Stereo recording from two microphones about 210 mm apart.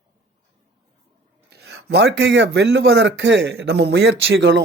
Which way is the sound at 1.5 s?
50° right (ahead or behind).